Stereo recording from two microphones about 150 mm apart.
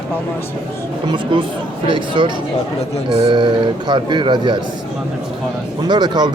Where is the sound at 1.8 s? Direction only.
30° right (ahead or behind).